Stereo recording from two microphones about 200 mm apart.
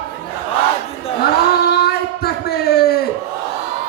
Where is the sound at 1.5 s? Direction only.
50° left (ahead or behind).